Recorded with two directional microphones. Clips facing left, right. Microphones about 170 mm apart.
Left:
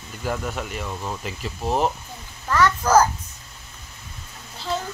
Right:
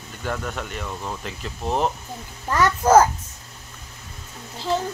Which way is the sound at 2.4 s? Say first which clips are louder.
Right 2 dB; 25° right (ahead or behind).